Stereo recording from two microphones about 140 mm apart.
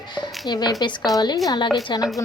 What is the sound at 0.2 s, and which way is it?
Speech, 30° left (ahead or behind).